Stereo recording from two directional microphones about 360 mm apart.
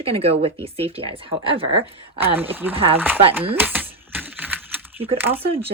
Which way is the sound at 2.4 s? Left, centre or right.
Centre.